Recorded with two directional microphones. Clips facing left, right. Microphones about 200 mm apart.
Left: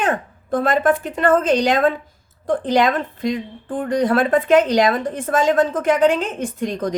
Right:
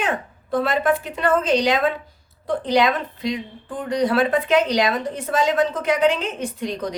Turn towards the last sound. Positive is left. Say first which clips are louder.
# left 3 dB
turn(degrees=50)  # may be behind; listen again after turning